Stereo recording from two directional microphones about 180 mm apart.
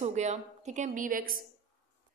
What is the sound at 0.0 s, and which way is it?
A woman's voice, 40° right (ahead or behind).